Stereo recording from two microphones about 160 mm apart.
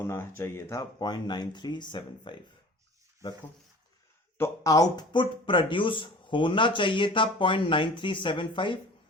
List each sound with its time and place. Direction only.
0.0 s speech: 15° left (ahead or behind)
4.4 s speech: 20° left (ahead or behind)